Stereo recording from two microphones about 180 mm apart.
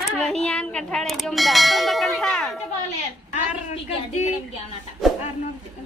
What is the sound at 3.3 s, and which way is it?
A woman's voice, 40° left (ahead or behind).